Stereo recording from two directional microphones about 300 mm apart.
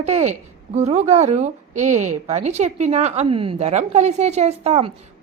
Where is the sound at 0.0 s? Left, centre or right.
Right.